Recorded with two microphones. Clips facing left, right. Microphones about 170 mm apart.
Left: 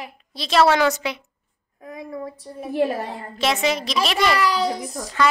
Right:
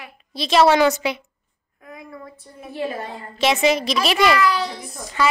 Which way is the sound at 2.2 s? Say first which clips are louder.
Left 7 dB; 35° left (ahead or behind).